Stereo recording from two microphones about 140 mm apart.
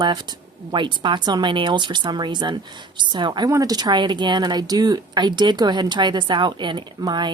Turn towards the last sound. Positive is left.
turn(degrees=-30)  # may be behind; listen again after turning